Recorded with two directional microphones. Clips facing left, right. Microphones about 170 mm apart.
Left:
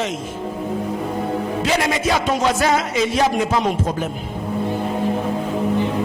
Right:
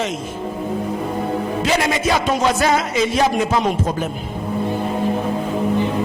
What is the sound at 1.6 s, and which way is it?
Speech, 15° right (ahead or behind).